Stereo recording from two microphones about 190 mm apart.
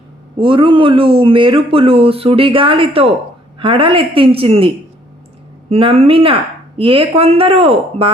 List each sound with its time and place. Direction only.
0.3 s speech: 25° right (ahead or behind)